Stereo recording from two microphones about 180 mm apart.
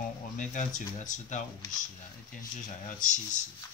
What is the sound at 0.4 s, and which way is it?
Speech, 45° left (ahead or behind).